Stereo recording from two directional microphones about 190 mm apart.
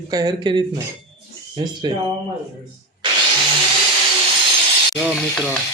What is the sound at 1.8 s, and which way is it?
Speech, 25° right (ahead or behind).